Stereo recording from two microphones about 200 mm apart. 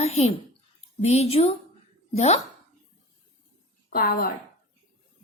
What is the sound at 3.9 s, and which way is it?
Speech, 50° left (ahead or behind).